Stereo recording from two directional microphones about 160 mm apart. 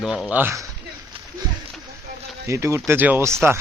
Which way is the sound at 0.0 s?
5° right (ahead or behind).